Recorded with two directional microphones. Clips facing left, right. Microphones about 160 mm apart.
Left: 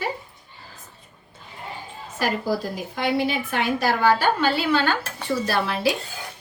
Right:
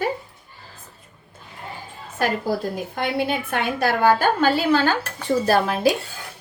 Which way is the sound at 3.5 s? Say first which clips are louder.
Right 1 dB; 50° right (ahead or behind).